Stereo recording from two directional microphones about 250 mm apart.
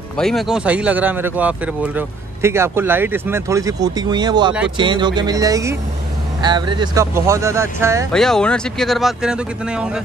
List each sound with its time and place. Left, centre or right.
0.2 s speech: centre
8.1 s speech: centre